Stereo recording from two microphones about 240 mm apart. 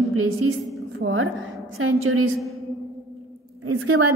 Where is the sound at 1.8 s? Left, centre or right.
Right.